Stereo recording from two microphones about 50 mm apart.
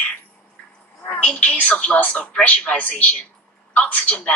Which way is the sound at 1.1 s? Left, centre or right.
Left.